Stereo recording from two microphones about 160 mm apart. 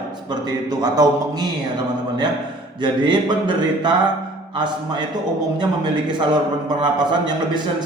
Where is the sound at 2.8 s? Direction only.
30° right (ahead or behind).